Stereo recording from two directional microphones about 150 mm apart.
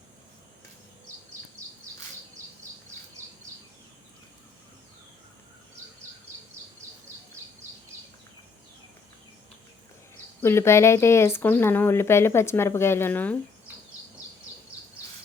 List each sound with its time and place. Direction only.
10.4 s speech: 15° left (ahead or behind)